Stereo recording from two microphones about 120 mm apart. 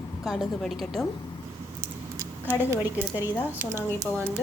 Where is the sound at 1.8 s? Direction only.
25° right (ahead or behind).